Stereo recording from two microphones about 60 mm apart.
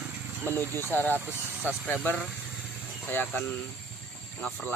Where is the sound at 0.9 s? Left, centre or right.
Left.